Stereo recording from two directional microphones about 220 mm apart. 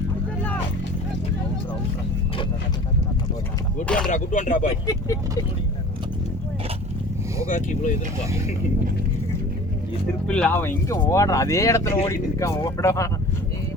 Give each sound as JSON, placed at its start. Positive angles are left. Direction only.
{"t": 3.8, "sound": "speech", "side_deg": 5}
{"t": 4.1, "sound": "speech", "side_deg": 35}
{"t": 7.4, "sound": "speech", "side_deg": 35}
{"t": 10.2, "sound": "speech", "side_deg": 5}